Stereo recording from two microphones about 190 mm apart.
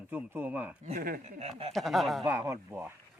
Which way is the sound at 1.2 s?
35° right (ahead or behind).